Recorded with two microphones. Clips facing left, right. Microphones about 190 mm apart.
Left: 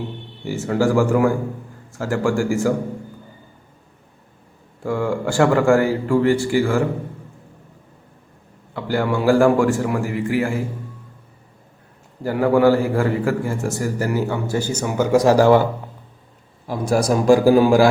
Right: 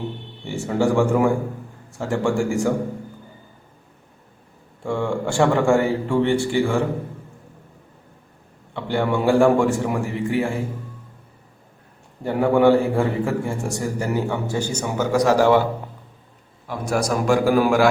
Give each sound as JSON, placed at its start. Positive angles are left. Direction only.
{"t": 0.4, "sound": "a man's voice", "side_deg": 0}
{"t": 4.9, "sound": "a man's voice", "side_deg": 0}
{"t": 8.7, "sound": "a man's voice", "side_deg": 5}
{"t": 12.2, "sound": "a man's voice", "side_deg": 0}
{"t": 15.1, "sound": "speech", "side_deg": 25}
{"t": 15.4, "sound": "a man's voice", "side_deg": 40}
{"t": 16.6, "sound": "a man's voice", "side_deg": 35}